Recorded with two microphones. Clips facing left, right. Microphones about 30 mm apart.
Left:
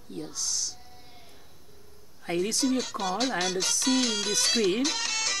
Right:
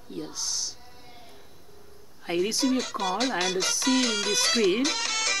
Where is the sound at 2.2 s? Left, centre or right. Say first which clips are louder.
Right 2 dB; centre.